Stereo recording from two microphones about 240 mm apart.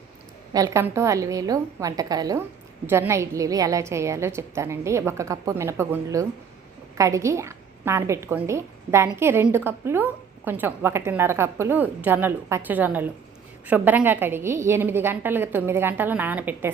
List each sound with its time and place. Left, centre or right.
0.5 s a woman's voice: centre